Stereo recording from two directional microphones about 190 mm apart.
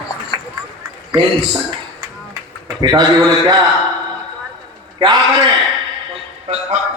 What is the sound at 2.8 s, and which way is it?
Speech, 20° right (ahead or behind).